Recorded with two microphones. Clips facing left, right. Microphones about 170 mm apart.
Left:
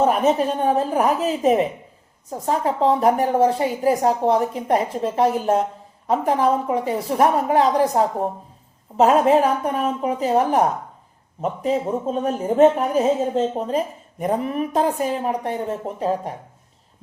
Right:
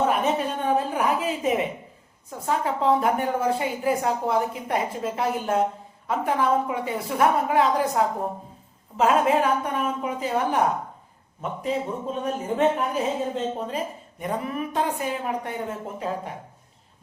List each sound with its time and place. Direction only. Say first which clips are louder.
0.0 s speech: left 5 dB; 40° left (ahead or behind)
11.6 s speech: left 5 dB; 40° left (ahead or behind)